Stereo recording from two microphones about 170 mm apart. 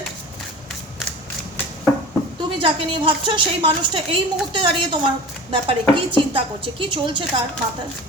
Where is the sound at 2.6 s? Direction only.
30° right (ahead or behind).